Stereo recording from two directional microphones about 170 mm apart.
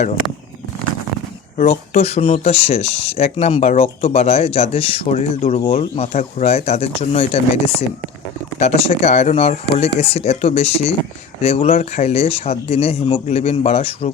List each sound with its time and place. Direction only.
1.5 s speech: 40° left (ahead or behind)